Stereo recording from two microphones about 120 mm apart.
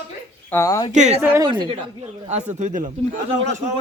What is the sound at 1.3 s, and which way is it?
Speech, 40° right (ahead or behind).